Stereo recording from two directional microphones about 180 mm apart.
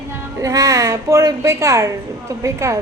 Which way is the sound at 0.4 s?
20° right (ahead or behind).